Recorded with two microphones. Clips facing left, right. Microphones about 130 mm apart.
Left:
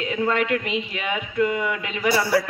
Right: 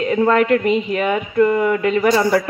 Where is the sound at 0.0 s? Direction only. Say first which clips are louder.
Right 8 dB; 45° right (ahead or behind).